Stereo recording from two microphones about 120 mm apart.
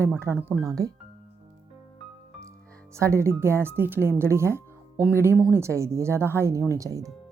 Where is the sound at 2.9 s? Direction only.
25° right (ahead or behind).